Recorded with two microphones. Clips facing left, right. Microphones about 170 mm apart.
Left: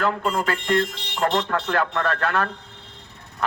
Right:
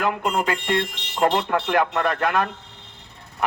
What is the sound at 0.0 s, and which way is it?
A man's voice, 15° right (ahead or behind).